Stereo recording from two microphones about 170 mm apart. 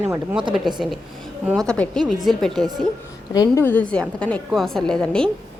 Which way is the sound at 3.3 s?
20° left (ahead or behind).